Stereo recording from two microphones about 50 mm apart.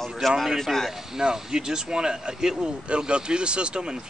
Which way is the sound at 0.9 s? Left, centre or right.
Centre.